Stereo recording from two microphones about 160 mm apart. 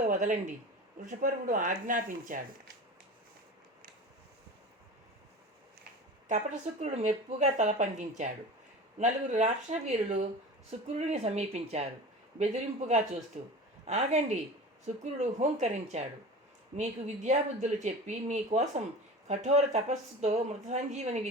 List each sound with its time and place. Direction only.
0.0 s speech: 50° right (ahead or behind)
6.7 s speech: 45° right (ahead or behind)